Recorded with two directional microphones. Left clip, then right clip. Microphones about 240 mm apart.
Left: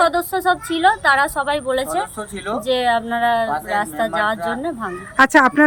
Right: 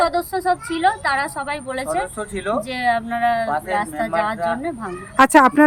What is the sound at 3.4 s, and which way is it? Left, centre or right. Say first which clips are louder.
Speech: even; centre.